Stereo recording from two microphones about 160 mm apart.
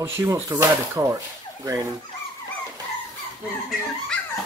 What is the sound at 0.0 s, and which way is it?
Speech, 15° right (ahead or behind).